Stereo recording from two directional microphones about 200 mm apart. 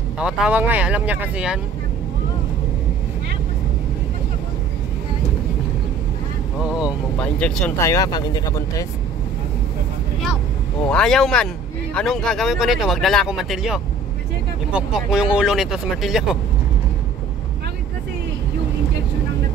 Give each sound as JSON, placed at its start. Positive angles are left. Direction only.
{"t": 0.2, "sound": "speech", "side_deg": -5}
{"t": 6.6, "sound": "speech", "side_deg": -5}
{"t": 7.9, "sound": "speech", "side_deg": 20}
{"t": 10.8, "sound": "speech", "side_deg": 5}